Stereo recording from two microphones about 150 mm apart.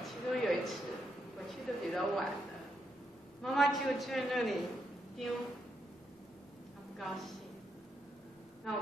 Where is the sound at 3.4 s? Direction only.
Centre (ahead or behind).